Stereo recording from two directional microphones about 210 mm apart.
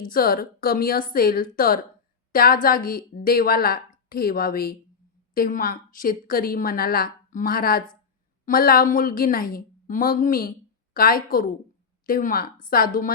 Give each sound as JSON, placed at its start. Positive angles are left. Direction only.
{"t": 0.0, "sound": "a woman's voice", "side_deg": 45}